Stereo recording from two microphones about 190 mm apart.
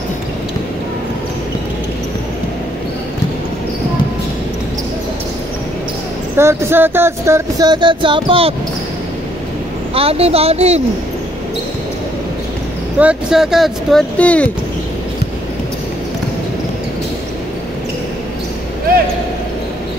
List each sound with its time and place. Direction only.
6.3 s music: 10° right (ahead or behind); by 8.5 s 30° right (ahead or behind)
9.9 s speech: 30° right (ahead or behind)
13.0 s speech: 5° right (ahead or behind)